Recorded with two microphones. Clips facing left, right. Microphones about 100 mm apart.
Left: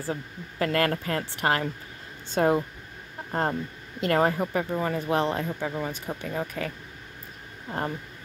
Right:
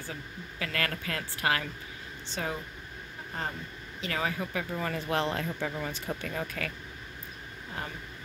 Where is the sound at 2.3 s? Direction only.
50° left (ahead or behind).